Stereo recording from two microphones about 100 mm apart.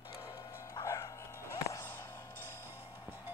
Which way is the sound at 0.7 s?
35° left (ahead or behind).